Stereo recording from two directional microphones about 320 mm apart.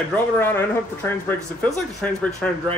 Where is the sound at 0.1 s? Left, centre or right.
Centre.